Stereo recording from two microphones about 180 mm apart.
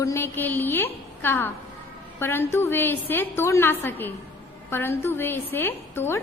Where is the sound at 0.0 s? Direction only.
15° left (ahead or behind).